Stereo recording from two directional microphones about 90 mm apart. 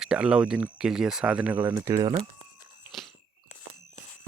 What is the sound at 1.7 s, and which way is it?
Speech, 35° right (ahead or behind).